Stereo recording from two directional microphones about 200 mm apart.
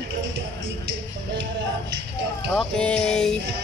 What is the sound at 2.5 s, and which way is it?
Music, 5° left (ahead or behind).